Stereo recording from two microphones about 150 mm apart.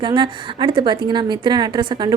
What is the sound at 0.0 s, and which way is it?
A woman's voice, 30° right (ahead or behind).